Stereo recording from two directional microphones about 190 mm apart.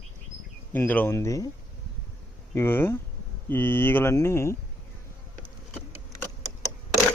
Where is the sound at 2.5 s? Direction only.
10° left (ahead or behind).